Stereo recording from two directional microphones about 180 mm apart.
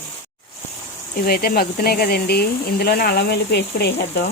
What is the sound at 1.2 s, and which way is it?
Speech, 55° left (ahead or behind).